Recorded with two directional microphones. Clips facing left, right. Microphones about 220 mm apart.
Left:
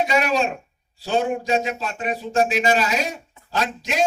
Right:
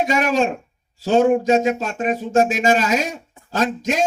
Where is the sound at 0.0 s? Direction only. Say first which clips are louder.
Right 2 dB; 45° right (ahead or behind).